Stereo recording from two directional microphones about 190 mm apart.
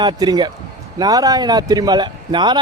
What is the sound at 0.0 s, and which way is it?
A man's voice, 25° right (ahead or behind).